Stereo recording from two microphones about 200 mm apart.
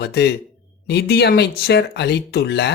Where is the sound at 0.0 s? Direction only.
55° left (ahead or behind).